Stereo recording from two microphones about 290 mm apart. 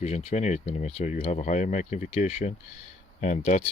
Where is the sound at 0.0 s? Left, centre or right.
Left.